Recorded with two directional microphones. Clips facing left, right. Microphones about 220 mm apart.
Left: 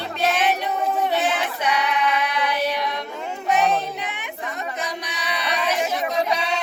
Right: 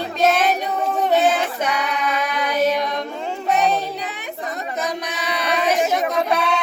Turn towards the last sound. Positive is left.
turn(degrees=-55)  # may be behind; listen again after turning